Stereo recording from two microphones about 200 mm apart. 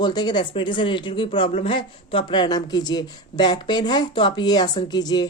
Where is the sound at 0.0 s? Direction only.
20° left (ahead or behind).